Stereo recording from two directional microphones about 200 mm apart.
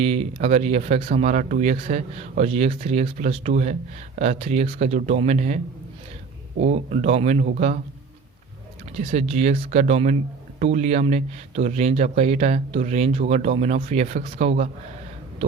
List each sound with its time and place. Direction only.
0.0 s speech: 30° right (ahead or behind)
6.6 s speech: 35° right (ahead or behind)
9.0 s speech: 35° right (ahead or behind)